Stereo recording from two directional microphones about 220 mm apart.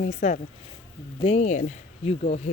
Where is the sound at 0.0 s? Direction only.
30° left (ahead or behind).